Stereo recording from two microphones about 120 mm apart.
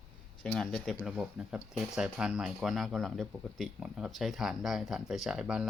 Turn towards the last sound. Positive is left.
turn(degrees=-5)  # may be behind; listen again after turning